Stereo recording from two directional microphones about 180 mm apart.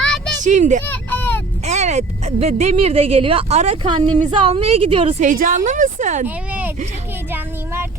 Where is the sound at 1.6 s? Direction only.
40° right (ahead or behind).